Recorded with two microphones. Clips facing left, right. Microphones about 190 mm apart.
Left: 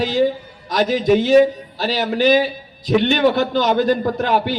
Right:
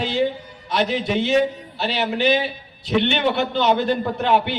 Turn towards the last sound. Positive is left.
turn(degrees=40)  # may be behind; listen again after turning